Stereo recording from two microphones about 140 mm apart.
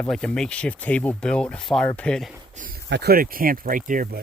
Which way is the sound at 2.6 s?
90° right.